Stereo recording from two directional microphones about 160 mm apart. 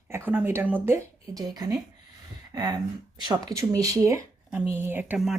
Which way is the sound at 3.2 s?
20° right (ahead or behind).